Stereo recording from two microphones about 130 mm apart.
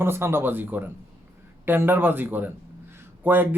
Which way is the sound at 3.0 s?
15° right (ahead or behind).